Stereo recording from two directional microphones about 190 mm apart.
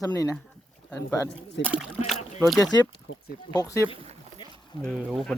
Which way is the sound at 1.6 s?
75° left (ahead or behind).